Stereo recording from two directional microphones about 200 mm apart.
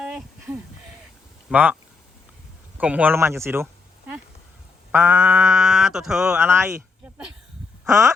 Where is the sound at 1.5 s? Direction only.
10° right (ahead or behind).